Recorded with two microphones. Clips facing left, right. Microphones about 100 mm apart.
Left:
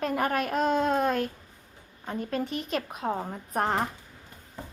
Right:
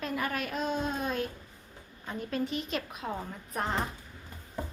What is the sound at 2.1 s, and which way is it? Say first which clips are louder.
A child's voice: left 2 dB; 45° left (ahead or behind).